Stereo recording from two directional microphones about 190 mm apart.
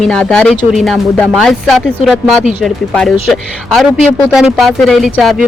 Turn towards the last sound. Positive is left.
turn(degrees=0)  # may be behind; listen again after turning